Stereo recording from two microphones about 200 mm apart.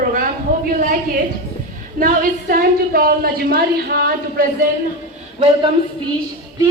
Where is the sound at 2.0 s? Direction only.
45° right (ahead or behind).